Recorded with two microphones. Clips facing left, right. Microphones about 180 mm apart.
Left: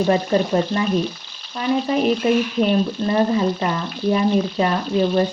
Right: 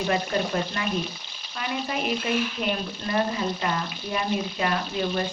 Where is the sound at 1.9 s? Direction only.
40° left (ahead or behind).